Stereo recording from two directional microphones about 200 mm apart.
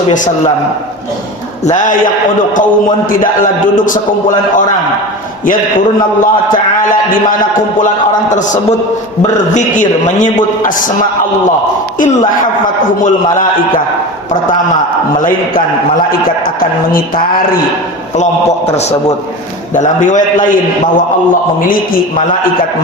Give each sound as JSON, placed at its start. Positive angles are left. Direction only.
{"t": 3.6, "sound": "a man's voice", "side_deg": 40}
{"t": 6.9, "sound": "a man's voice", "side_deg": 45}
{"t": 9.2, "sound": "a man's voice", "side_deg": 40}
{"t": 15.2, "sound": "a man's voice", "side_deg": 40}
{"t": 19.7, "sound": "a man's voice", "side_deg": 40}